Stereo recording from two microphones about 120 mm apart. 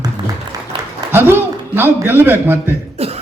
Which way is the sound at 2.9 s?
60° right (ahead or behind).